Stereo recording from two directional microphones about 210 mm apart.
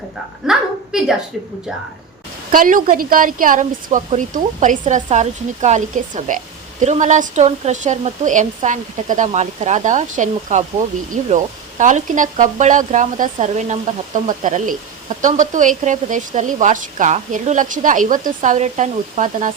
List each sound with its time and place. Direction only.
0.5 s a woman's voice: centre (ahead or behind)
2.5 s a woman's voice: 40° right (ahead or behind)